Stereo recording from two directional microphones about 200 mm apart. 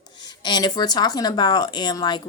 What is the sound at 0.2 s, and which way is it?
Speech, 20° left (ahead or behind).